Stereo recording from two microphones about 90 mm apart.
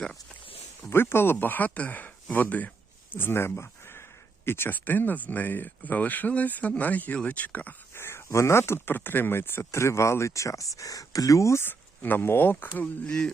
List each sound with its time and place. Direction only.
0.8 s speech: 25° left (ahead or behind)
7.9 s speech: 30° left (ahead or behind)
12.7 s speech: 15° left (ahead or behind)